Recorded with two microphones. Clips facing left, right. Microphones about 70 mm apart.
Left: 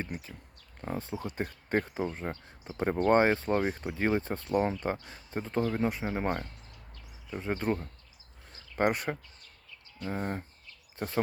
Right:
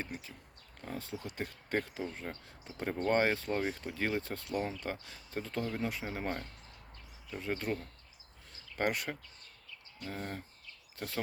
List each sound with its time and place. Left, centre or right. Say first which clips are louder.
0.0 s speech: left 4 dB; left